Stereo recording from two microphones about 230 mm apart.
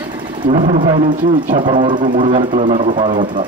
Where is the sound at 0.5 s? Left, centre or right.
Right.